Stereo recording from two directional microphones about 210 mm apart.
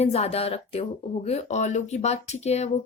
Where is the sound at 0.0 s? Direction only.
30° left (ahead or behind).